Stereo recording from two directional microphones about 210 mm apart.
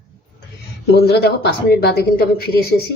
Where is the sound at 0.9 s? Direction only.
50° left (ahead or behind).